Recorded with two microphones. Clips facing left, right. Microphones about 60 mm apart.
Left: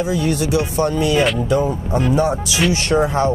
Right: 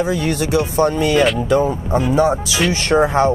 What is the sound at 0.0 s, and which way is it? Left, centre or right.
Speech, right.